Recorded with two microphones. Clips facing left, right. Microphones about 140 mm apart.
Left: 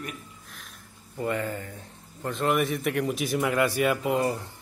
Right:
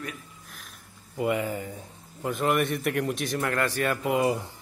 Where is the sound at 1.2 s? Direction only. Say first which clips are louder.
Right 2 dB; 10° right (ahead or behind); by 4.1 s 5° left (ahead or behind).